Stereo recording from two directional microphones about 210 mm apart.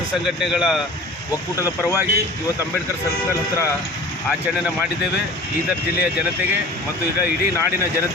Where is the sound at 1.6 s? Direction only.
15° left (ahead or behind).